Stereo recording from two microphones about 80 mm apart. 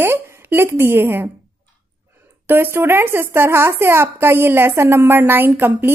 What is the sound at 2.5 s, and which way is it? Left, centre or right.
Speech, right.